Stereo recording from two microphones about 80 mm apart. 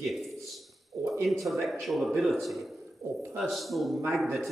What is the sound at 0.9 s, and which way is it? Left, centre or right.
Speech, right.